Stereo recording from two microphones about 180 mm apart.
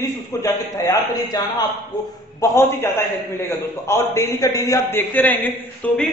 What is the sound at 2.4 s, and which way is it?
A man's voice, 15° left (ahead or behind).